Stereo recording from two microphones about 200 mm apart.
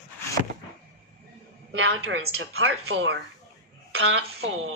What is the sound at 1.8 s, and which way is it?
A woman's voice, 70° right (ahead or behind).